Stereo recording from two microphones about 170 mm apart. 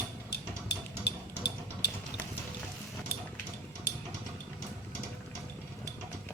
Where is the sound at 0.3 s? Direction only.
75° left (ahead or behind).